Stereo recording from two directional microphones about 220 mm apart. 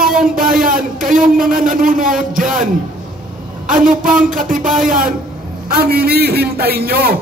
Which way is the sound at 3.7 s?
40° right (ahead or behind).